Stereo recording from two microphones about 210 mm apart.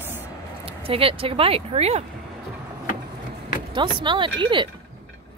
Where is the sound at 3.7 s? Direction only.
20° right (ahead or behind).